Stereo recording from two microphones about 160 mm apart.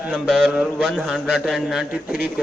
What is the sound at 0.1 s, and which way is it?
Mantra, centre (ahead or behind).